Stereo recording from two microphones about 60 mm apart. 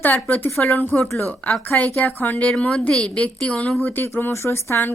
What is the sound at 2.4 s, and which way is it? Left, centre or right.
Speech, centre.